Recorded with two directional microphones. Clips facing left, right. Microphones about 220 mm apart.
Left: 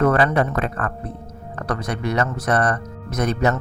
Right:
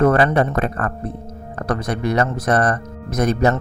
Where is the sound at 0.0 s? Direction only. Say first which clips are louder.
Right 2 dB; 35° right (ahead or behind).